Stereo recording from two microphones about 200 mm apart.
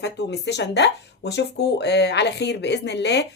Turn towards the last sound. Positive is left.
turn(degrees=60)  # may be behind; listen again after turning